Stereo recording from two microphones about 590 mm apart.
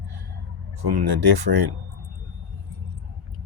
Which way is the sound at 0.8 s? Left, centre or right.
Right.